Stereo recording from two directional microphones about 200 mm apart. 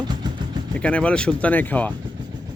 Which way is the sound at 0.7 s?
5° left (ahead or behind).